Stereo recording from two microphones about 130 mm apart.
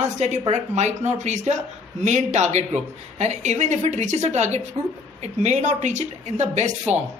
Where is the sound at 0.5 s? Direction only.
60° right (ahead or behind).